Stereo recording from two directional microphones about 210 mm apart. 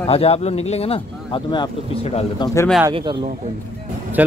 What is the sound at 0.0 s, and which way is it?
Speech, 30° left (ahead or behind).